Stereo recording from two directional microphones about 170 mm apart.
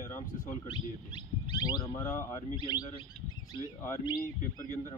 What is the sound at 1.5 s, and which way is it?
Speech, 25° left (ahead or behind).